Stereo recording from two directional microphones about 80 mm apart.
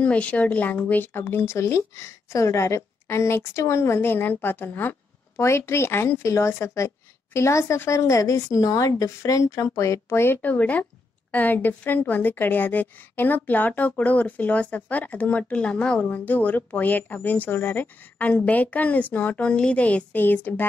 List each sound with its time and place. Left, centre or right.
0.0 s a woman's voice: centre